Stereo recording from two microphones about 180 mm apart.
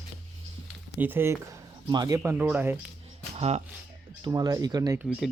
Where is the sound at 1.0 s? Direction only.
10° right (ahead or behind).